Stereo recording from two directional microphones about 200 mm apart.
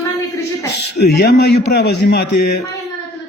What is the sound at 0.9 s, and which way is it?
A man's voice, 55° left (ahead or behind).